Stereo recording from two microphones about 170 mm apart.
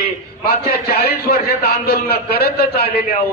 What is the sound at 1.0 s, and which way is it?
A man's voice, 65° left (ahead or behind).